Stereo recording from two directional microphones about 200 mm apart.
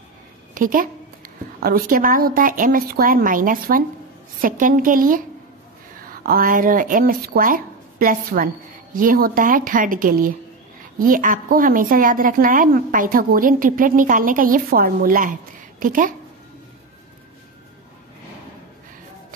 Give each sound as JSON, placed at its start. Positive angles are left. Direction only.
{"t": 0.6, "sound": "a woman's voice", "side_deg": -45}